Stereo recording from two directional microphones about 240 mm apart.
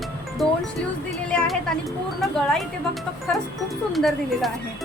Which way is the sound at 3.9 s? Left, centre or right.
Centre.